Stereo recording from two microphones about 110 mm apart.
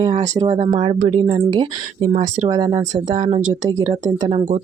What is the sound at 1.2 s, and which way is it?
Speech, 60° right (ahead or behind).